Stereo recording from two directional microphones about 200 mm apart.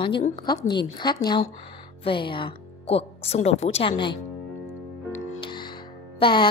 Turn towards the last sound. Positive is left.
turn(degrees=25)  # may be behind; listen again after turning